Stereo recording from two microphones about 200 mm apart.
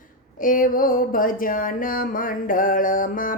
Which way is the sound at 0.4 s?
45° left (ahead or behind).